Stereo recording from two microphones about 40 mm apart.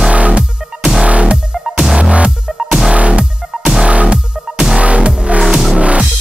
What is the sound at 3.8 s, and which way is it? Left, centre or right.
Music, right.